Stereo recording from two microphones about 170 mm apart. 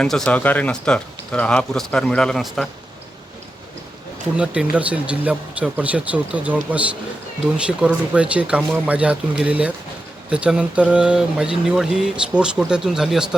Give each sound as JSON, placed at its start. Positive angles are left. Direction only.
{"t": 0.0, "sound": "speech", "side_deg": 5}
{"t": 4.4, "sound": "speech", "side_deg": -5}